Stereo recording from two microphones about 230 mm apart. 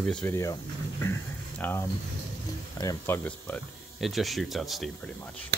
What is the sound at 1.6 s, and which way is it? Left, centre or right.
Speech, centre.